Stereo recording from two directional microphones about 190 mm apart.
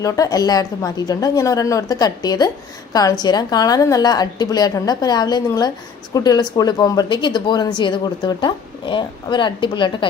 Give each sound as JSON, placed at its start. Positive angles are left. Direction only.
{"t": 0.0, "sound": "speech", "side_deg": 20}